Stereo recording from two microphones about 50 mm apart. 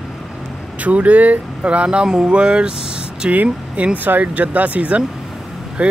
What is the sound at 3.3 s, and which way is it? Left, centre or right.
Speech, right.